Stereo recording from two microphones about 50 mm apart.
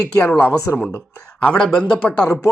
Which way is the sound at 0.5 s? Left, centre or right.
Left.